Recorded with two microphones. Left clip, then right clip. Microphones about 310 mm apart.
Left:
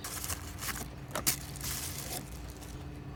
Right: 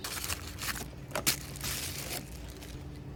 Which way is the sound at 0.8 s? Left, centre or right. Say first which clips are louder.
Right 2 dB; centre.